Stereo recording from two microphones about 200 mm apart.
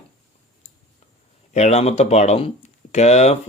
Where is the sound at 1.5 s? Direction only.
35° left (ahead or behind).